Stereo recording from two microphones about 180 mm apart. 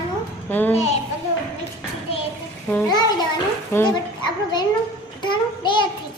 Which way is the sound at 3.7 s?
10° left (ahead or behind).